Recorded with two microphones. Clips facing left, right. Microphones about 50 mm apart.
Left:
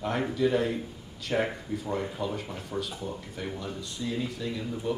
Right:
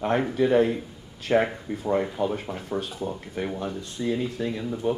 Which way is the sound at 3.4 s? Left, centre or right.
Right.